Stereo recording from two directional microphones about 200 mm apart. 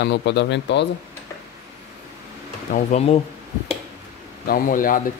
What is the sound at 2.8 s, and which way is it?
Speech, 30° left (ahead or behind).